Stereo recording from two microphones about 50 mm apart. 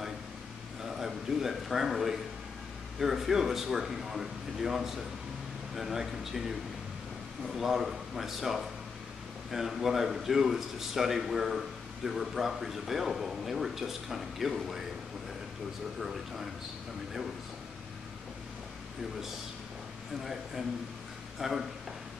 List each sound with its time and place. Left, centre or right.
0.8 s a man's voice: centre
16.0 s a man's voice: centre
21.4 s speech: centre